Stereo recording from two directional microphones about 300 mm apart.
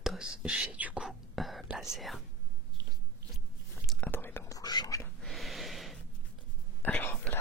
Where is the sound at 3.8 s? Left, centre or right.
Centre.